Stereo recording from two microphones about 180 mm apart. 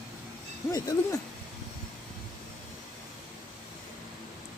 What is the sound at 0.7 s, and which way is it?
Speech, 20° left (ahead or behind).